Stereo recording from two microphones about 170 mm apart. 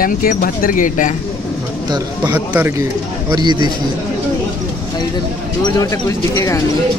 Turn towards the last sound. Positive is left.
turn(degrees=20)  # may be behind; listen again after turning